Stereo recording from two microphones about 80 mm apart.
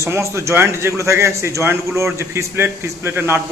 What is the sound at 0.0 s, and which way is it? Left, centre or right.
A man's voice, right.